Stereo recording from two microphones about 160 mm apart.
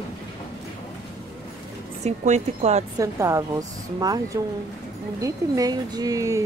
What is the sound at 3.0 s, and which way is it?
Speech, 20° right (ahead or behind).